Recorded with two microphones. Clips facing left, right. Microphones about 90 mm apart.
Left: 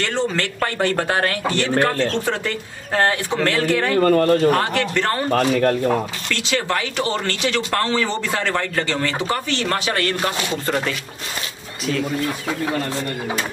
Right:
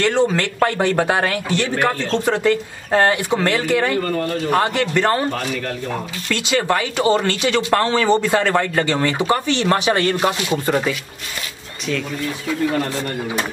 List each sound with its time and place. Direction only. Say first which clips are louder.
0.0 s speech: right 5 dB; 15° right (ahead or behind)
4.0 s speech: left 7 dB; 60° left (ahead or behind)
4.6 s speech: right 2 dB; 15° right (ahead or behind)
5.3 s speech: left 7 dB; 45° left (ahead or behind)
6.3 s speech: right 4 dB; 15° right (ahead or behind)